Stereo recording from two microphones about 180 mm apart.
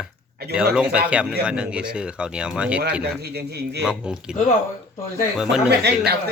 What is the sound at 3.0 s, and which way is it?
Speech, 65° right (ahead or behind).